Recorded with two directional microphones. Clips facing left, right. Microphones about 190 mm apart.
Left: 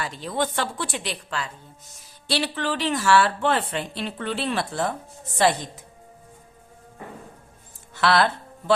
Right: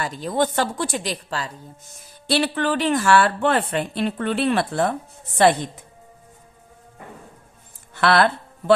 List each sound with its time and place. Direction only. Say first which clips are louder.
0.0 s a woman's voice: right 4 dB; 45° right (ahead or behind)
2.2 s a woman's voice: right 5 dB; 55° right (ahead or behind)
7.9 s speech: right 3 dB; 55° right (ahead or behind)